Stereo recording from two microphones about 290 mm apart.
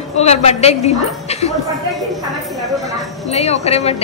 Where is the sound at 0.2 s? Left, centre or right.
Left.